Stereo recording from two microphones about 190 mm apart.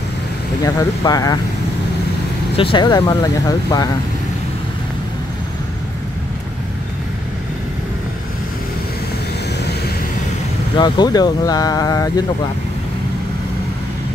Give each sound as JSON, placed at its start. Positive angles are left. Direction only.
{"t": 0.7, "sound": "speech", "side_deg": 20}
{"t": 2.5, "sound": "speech", "side_deg": 25}
{"t": 10.8, "sound": "speech", "side_deg": 20}